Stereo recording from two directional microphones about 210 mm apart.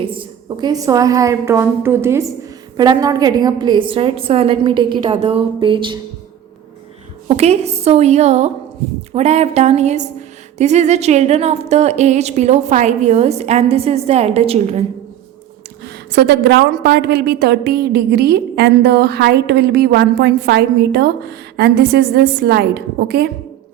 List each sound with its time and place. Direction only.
0.0 s a woman's voice: 25° right (ahead or behind)
7.3 s a sound: 30° right (ahead or behind)
15.8 s a woman's voice: 50° right (ahead or behind)